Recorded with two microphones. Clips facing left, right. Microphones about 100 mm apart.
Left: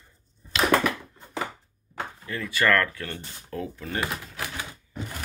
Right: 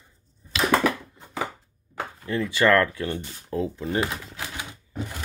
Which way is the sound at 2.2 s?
25° right (ahead or behind).